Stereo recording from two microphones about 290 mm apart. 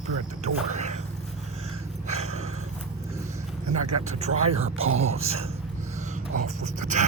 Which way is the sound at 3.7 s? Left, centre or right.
Right.